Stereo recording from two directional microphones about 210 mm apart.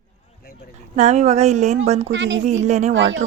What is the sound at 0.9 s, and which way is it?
Speech, 35° right (ahead or behind).